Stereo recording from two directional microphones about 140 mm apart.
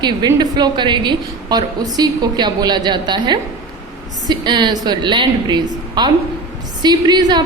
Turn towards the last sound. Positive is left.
turn(degrees=-30)  # may be behind; listen again after turning